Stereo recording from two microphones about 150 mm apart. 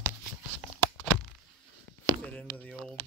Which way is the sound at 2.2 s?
10° left (ahead or behind).